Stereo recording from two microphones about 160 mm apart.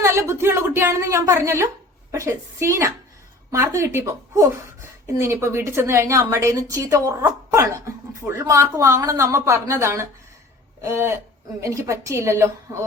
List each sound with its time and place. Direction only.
0.0 s a woman's voice: 15° right (ahead or behind)